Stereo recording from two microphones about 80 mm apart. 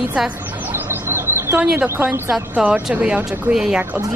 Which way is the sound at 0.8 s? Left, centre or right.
Right.